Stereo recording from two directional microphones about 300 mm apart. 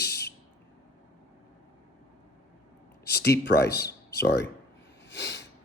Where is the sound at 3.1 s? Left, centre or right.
Left.